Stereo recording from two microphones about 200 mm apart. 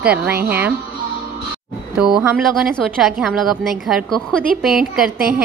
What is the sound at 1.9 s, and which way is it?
A woman's voice, 5° right (ahead or behind).